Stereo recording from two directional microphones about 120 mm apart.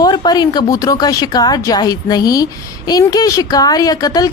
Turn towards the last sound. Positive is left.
turn(degrees=30)  # may be behind; listen again after turning